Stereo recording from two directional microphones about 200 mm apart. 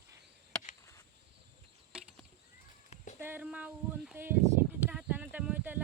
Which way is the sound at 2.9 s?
35° left (ahead or behind).